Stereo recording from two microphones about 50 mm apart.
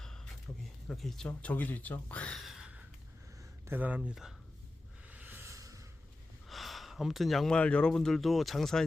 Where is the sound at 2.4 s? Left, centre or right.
Centre.